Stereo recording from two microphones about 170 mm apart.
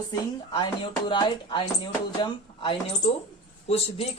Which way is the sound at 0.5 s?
30° left (ahead or behind).